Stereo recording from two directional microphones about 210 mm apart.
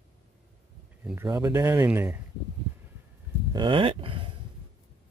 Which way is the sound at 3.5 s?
25° right (ahead or behind).